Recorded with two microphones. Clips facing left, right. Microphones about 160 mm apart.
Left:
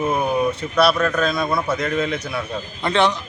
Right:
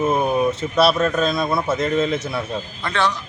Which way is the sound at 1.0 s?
25° right (ahead or behind).